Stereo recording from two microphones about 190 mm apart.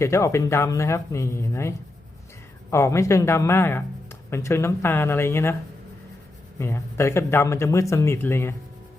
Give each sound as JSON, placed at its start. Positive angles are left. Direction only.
{"t": 0.0, "sound": "speech", "side_deg": 15}
{"t": 6.6, "sound": "speech", "side_deg": 15}